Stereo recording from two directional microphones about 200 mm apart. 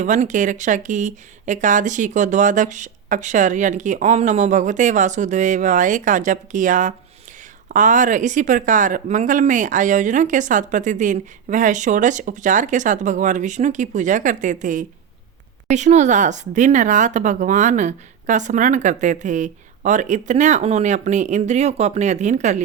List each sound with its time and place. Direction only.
0.0 s speech: 40° right (ahead or behind)